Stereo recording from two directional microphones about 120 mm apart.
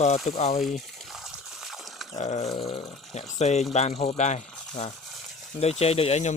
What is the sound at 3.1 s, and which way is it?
Speech, 75° left (ahead or behind).